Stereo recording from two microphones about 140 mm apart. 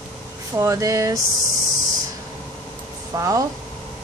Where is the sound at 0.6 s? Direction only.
20° right (ahead or behind).